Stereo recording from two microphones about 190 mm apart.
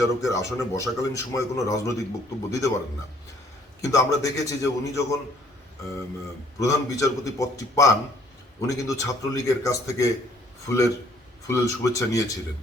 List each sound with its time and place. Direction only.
0.0 s a man's voice: 15° left (ahead or behind)
3.8 s a man's voice: 15° left (ahead or behind)
6.6 s a man's voice: 15° left (ahead or behind)